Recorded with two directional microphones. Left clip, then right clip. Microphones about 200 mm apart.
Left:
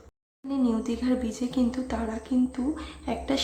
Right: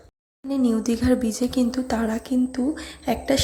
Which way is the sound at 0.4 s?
25° right (ahead or behind).